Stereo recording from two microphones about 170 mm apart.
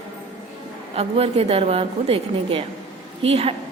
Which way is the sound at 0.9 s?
35° right (ahead or behind).